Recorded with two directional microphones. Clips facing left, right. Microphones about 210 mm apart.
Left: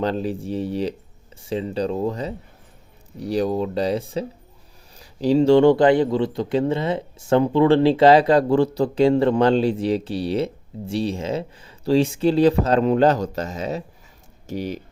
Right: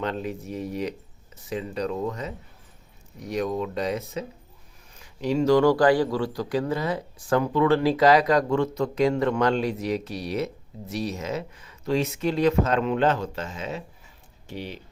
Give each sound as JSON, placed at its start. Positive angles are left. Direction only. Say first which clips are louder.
{"t": 0.0, "sound": "speech", "louder": "left 6 dB", "side_deg": 35}